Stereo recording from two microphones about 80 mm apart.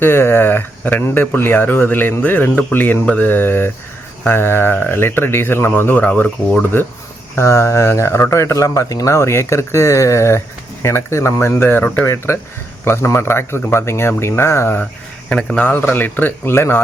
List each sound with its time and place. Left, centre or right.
0.0 s speech: left
6.7 s speech: left